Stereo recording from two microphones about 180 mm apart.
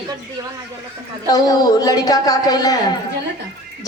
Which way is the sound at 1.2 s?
20° left (ahead or behind).